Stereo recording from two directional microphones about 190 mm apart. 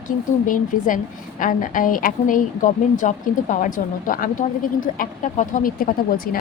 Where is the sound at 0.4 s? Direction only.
45° left (ahead or behind).